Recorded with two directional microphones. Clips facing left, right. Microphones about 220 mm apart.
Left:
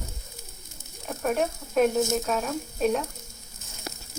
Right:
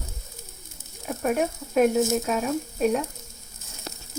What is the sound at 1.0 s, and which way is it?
A woman's voice, 5° right (ahead or behind).